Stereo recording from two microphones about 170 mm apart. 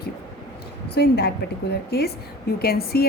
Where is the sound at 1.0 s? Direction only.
70° left (ahead or behind).